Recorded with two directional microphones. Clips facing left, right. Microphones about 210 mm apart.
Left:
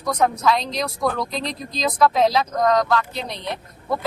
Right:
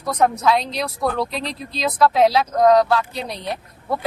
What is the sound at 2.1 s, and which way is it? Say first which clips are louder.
Speech: right 2 dB; 10° right (ahead or behind).